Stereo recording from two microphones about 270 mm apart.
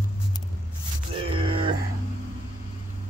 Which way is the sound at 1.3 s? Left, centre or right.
Centre.